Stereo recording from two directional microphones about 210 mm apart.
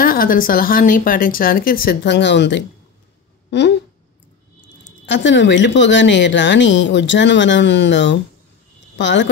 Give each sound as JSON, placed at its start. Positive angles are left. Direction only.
{"t": 0.0, "sound": "speech", "side_deg": 45}
{"t": 5.0, "sound": "a woman's voice", "side_deg": 60}